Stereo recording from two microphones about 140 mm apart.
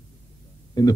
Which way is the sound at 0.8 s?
25° left (ahead or behind).